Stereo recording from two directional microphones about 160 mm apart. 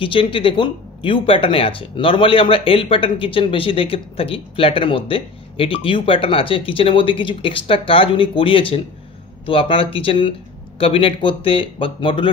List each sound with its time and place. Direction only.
0.0 s speech: 35° left (ahead or behind)